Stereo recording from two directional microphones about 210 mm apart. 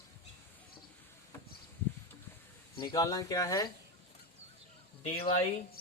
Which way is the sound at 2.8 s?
20° left (ahead or behind).